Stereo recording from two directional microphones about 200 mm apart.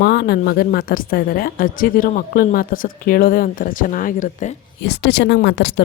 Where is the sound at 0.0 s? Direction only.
50° left (ahead or behind).